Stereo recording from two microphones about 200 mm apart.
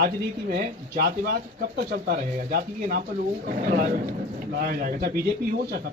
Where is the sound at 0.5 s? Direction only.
50° right (ahead or behind).